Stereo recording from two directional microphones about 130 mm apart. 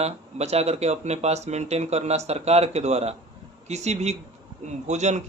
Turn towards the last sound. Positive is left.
turn(degrees=-60)  # may be behind; listen again after turning